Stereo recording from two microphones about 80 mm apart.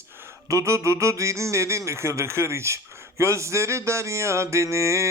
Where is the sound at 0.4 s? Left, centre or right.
Right.